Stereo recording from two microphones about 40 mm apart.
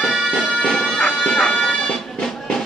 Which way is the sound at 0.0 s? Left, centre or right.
Centre.